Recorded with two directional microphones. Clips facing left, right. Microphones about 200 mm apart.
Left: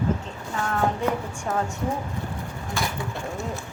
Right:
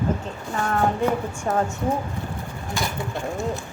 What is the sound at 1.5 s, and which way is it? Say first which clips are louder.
Speech: right 3 dB; 45° right (ahead or behind).